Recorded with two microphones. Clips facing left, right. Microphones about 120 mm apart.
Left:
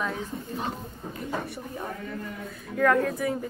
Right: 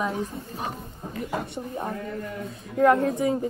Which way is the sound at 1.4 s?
25° right (ahead or behind).